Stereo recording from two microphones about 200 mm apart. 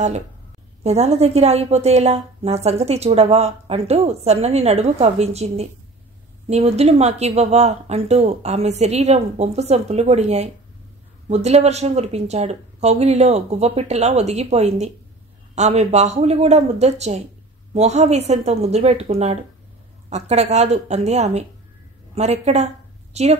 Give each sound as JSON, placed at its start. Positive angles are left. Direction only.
{"t": 0.8, "sound": "a woman's voice", "side_deg": -35}